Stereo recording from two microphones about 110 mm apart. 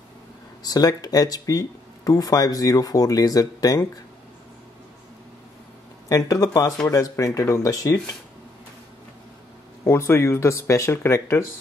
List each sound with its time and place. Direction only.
0.6 s speech: 35° left (ahead or behind)
6.0 s speech: 30° left (ahead or behind)
9.8 s speech: 25° left (ahead or behind)